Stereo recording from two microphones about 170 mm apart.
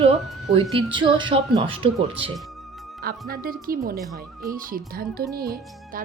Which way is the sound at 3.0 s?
60° right (ahead or behind).